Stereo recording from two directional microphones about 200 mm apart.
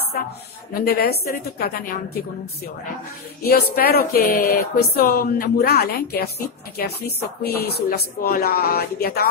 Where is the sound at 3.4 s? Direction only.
50° left (ahead or behind).